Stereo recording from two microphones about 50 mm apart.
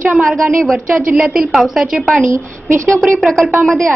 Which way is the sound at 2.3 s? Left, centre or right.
Right.